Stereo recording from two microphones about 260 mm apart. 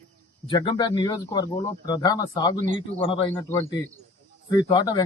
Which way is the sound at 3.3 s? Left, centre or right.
Centre.